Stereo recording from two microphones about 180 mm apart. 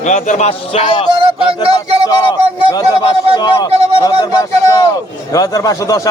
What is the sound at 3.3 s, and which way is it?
Speech, 25° left (ahead or behind).